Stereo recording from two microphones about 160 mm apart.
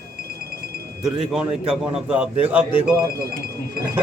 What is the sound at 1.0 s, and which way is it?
Speech, 5° right (ahead or behind).